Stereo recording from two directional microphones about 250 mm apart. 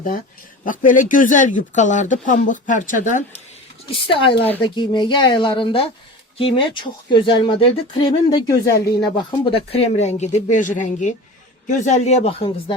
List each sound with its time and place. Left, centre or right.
0.6 s speech: left